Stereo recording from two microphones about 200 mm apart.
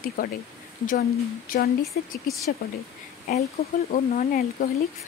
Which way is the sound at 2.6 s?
45° left (ahead or behind).